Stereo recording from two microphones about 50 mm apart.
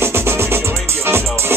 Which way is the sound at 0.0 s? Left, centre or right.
Right.